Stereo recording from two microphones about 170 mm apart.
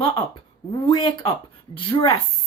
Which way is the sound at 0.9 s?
25° left (ahead or behind).